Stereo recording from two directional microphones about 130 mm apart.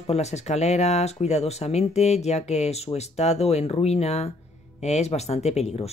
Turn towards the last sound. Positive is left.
turn(degrees=55)  # may be behind; listen again after turning